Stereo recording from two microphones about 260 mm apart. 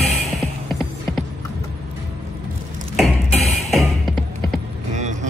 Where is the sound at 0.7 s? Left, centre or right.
Centre.